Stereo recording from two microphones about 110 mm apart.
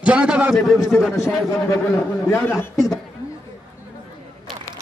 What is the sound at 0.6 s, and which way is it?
Speech, centre (ahead or behind).